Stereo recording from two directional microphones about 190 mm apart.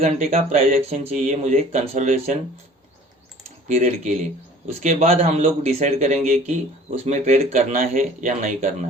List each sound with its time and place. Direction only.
0.0 s speech: 30° right (ahead or behind)
3.7 s speech: 35° right (ahead or behind)